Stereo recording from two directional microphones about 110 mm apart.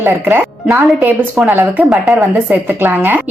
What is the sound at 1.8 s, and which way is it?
A woman's voice, 5° right (ahead or behind).